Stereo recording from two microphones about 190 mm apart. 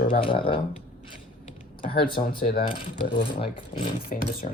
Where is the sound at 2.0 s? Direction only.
25° left (ahead or behind).